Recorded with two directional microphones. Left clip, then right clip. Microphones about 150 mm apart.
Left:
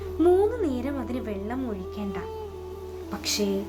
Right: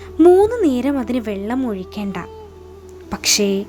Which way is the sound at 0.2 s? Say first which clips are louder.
Right 10 dB; 35° right (ahead or behind).